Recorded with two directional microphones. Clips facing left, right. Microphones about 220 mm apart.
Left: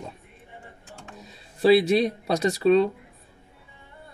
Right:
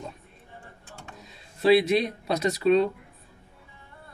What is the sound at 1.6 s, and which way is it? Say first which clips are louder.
Speech: left 2 dB; 35° left (ahead or behind).